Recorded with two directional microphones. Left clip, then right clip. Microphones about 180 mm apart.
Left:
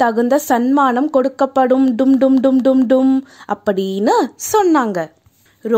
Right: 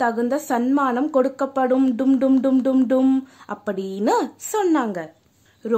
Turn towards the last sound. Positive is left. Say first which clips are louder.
# left 6 dB
turn(degrees=30)  # may be behind; listen again after turning